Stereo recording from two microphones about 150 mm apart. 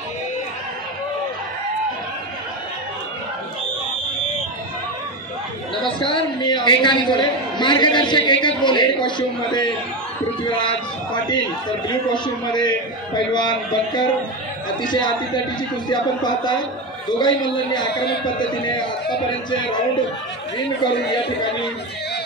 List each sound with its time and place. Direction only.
5.9 s a woman's voice: 30° left (ahead or behind)
11.9 s a man's voice: 30° left (ahead or behind)